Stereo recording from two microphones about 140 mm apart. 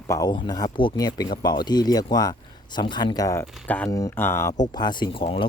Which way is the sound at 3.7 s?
10° left (ahead or behind).